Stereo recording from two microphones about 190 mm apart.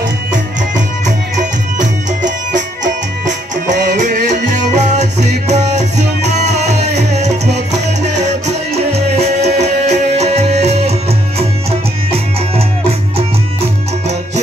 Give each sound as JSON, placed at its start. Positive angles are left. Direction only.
{"t": 0.3, "sound": "music", "side_deg": -40}
{"t": 3.9, "sound": "music", "side_deg": -40}